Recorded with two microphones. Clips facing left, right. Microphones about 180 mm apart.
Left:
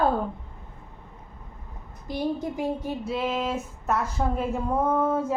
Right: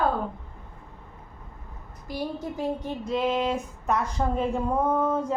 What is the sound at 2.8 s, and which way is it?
A woman's voice, 5° left (ahead or behind).